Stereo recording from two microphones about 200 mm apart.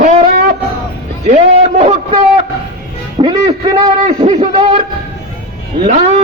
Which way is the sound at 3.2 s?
25° right (ahead or behind).